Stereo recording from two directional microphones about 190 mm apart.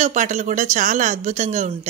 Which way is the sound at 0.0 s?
40° right (ahead or behind).